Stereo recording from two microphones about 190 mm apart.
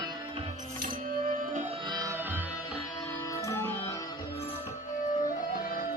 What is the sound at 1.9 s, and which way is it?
Music, 15° right (ahead or behind).